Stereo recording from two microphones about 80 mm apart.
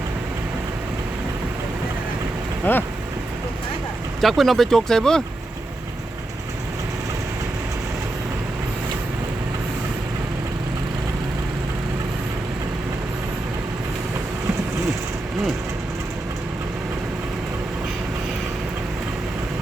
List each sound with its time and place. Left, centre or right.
2.7 s speech: left
4.2 s speech: centre